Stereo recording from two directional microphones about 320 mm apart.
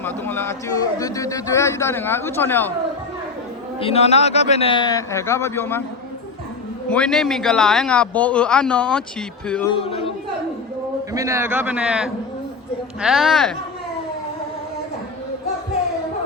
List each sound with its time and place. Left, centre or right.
0.0 s a man's voice: centre
3.8 s a man's voice: centre
6.9 s a man's voice: centre
9.7 s a man's voice: centre
11.1 s a man's voice: centre